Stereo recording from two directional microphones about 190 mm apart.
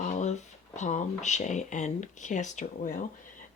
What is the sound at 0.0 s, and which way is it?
Speech, 40° left (ahead or behind).